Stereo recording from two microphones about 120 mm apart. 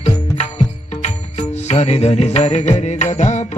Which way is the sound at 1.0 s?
70° left (ahead or behind).